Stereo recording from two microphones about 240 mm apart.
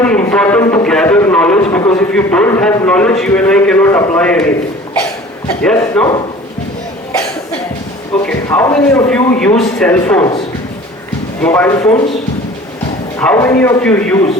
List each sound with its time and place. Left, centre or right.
0.0 s a man's voice: centre
5.6 s a man's voice: centre
8.1 s a man's voice: centre
11.4 s a man's voice: centre
13.1 s a man's voice: centre